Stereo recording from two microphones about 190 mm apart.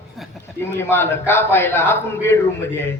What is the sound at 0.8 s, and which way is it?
A man's voice, 15° left (ahead or behind).